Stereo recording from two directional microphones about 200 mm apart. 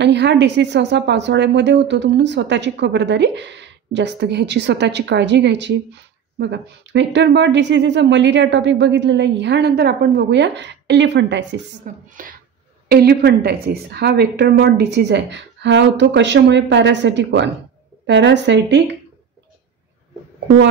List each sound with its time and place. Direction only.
0.0 s a woman's voice: 60° right (ahead or behind)
11.8 s speech: 40° right (ahead or behind)
12.8 s a woman's voice: 50° right (ahead or behind)